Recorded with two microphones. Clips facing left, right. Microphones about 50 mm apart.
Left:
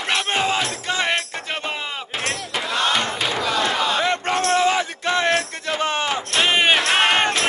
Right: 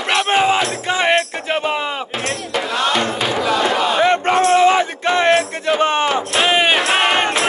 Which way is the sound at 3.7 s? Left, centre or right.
Right.